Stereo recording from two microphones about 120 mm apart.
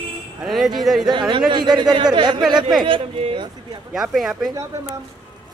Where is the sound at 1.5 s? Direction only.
35° right (ahead or behind).